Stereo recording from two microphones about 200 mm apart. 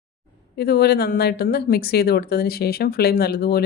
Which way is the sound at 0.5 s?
55° left (ahead or behind).